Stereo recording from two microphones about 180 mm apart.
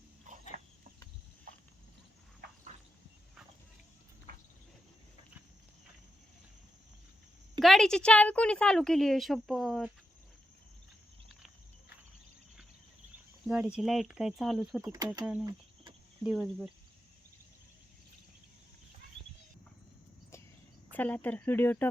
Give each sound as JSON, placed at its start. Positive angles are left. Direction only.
{"t": 0.3, "sound": "a sound", "side_deg": -45}
{"t": 7.6, "sound": "a woman's voice", "side_deg": 0}
{"t": 13.5, "sound": "a woman's voice", "side_deg": -5}
{"t": 14.8, "sound": "speech", "side_deg": -20}
{"t": 15.2, "sound": "a woman's voice", "side_deg": -5}
{"t": 15.4, "sound": "cricket", "side_deg": -25}
{"t": 16.2, "sound": "a woman's voice", "side_deg": 0}
{"t": 20.9, "sound": "speech", "side_deg": 10}